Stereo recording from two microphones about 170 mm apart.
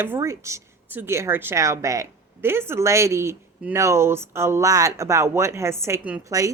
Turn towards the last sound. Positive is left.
turn(degrees=-20)  # may be behind; listen again after turning